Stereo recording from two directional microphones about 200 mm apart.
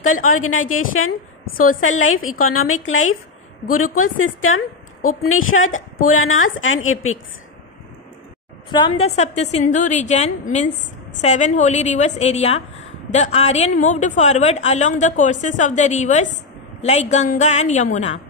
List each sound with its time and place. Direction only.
0.3 s a woman's voice: 90° left
1.5 s a woman's voice: 45° left (ahead or behind)
1.8 s a woman's voice: 80° left
4.0 s a woman's voice: 90° left
8.6 s a woman's voice: 25° left (ahead or behind)